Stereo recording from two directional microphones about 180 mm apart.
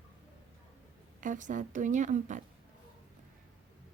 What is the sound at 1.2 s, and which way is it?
A woman's voice, 45° right (ahead or behind).